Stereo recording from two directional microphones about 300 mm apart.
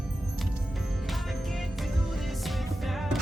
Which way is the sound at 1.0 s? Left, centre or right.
Centre.